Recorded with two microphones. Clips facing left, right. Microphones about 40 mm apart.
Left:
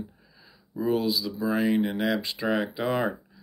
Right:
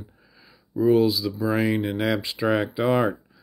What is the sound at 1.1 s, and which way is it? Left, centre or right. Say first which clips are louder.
Speech: right 3 dB; centre.